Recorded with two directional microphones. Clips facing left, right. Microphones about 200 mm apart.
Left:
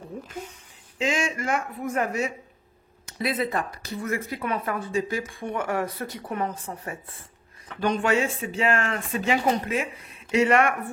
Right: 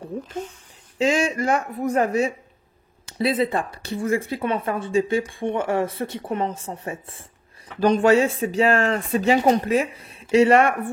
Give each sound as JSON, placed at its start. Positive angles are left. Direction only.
{"t": 0.9, "sound": "speech", "side_deg": -35}
{"t": 7.8, "sound": "speech", "side_deg": -35}